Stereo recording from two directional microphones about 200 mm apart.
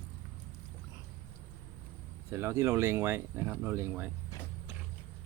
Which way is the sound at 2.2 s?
15° right (ahead or behind).